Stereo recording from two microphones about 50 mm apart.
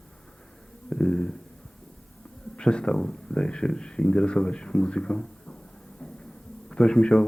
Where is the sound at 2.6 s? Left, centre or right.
Centre.